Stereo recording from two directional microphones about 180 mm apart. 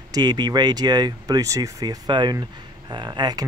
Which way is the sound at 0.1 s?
25° right (ahead or behind).